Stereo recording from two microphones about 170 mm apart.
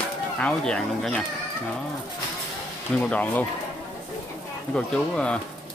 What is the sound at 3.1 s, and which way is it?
Speech, 10° left (ahead or behind).